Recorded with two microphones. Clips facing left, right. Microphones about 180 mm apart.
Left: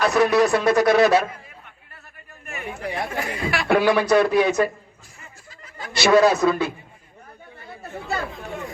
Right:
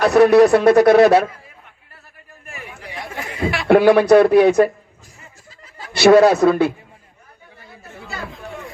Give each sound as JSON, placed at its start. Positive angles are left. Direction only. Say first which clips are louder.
{"t": 0.0, "sound": "speech", "louder": "right 7 dB", "side_deg": -60}
{"t": 2.8, "sound": "chatter", "louder": "left 6 dB", "side_deg": 55}
{"t": 3.4, "sound": "speech", "louder": "right 7 dB", "side_deg": -25}
{"t": 3.8, "sound": "speech", "louder": "right 7 dB", "side_deg": -60}
{"t": 5.5, "sound": "a sound", "louder": "left 2 dB", "side_deg": -30}
{"t": 6.0, "sound": "speech", "louder": "right 5 dB", "side_deg": -60}